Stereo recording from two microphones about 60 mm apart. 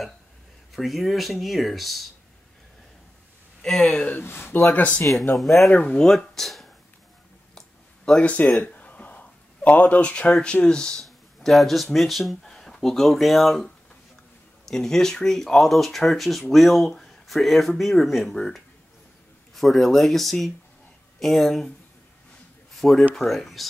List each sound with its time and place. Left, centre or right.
0.7 s speech: centre
3.6 s speech: centre
4.0 s speech: left
4.7 s speech: left
5.3 s speech: centre
8.0 s speech: centre
11.1 s speech: centre
14.7 s speech: centre
22.8 s speech: centre